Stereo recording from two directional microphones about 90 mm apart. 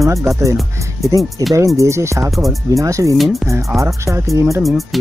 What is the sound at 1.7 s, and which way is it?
Speech, 30° right (ahead or behind).